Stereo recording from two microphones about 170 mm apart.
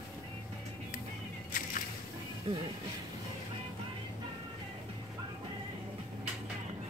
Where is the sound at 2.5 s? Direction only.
35° right (ahead or behind).